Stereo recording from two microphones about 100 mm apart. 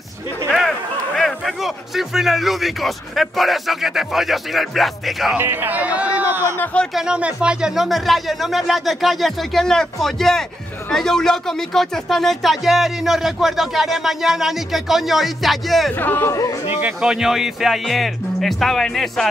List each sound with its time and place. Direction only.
0.5 s a man's voice: centre (ahead or behind)
5.4 s speech: 20° right (ahead or behind)
6.6 s speech: 10° left (ahead or behind)
6.9 s speech: 5° right (ahead or behind)
16.0 s speech: 20° left (ahead or behind)
17.0 s speech: 5° right (ahead or behind)